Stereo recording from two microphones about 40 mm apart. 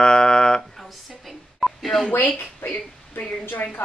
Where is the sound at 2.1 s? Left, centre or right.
Left.